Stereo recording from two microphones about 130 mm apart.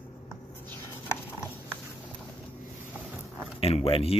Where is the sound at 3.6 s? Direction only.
50° left (ahead or behind).